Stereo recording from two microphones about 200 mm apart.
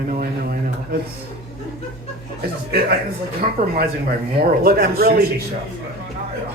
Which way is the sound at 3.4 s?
40° right (ahead or behind).